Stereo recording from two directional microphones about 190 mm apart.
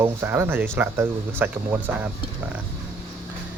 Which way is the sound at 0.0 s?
10° right (ahead or behind).